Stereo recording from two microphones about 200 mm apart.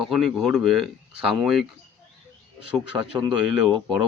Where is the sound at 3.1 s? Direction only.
15° right (ahead or behind).